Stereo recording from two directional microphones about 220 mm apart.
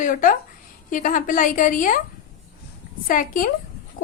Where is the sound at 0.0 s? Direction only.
35° left (ahead or behind).